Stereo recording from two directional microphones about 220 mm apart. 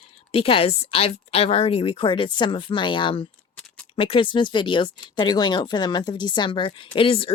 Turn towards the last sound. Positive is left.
turn(degrees=25)  # may be behind; listen again after turning